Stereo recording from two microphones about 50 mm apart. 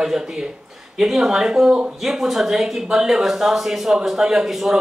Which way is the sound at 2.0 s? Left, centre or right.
Centre.